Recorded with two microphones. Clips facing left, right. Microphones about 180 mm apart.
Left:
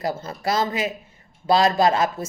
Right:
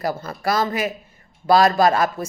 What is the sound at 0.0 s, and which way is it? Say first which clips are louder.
A woman's voice: right 2 dB; 20° left (ahead or behind).